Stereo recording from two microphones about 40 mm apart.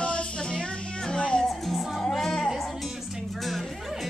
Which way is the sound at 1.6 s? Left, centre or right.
Centre.